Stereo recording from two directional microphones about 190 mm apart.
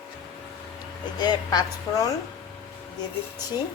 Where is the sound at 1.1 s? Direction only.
20° left (ahead or behind).